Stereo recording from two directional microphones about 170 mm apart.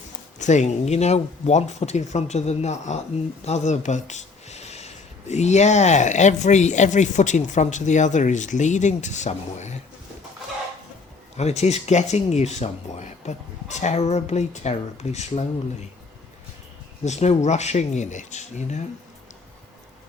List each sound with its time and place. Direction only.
0.3 s speech: 45° left (ahead or behind)
3.4 s a sound: 40° left (ahead or behind)
5.3 s speech: 40° left (ahead or behind)
11.3 s speech: 40° left (ahead or behind)
17.0 s speech: 40° left (ahead or behind)